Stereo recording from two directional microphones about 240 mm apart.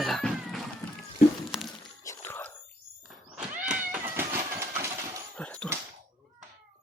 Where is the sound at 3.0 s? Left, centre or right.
Centre.